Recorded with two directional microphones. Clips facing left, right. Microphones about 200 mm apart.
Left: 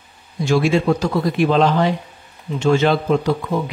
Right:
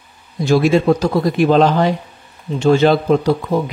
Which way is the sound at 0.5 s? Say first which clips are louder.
Right 4 dB; 40° right (ahead or behind).